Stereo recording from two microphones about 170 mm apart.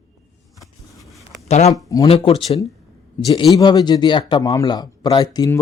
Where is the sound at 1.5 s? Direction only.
40° left (ahead or behind).